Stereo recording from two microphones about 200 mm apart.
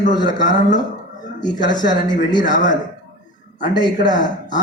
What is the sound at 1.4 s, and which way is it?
Speech, 20° left (ahead or behind).